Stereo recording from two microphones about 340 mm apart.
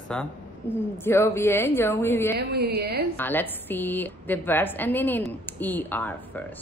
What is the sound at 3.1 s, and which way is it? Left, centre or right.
Speech, centre.